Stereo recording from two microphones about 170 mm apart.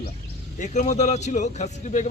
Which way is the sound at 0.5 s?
45° left (ahead or behind).